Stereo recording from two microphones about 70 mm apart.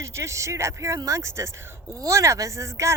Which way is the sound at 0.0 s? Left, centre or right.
Right.